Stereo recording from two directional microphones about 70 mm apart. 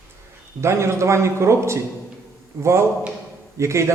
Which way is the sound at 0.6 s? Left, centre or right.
Right.